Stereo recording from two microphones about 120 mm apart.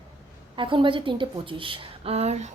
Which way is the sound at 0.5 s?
45° right (ahead or behind).